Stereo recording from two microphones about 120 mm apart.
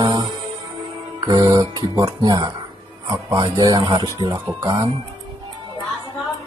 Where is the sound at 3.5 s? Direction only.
35° right (ahead or behind).